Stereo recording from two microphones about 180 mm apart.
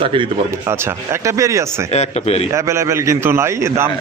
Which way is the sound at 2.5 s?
15° right (ahead or behind).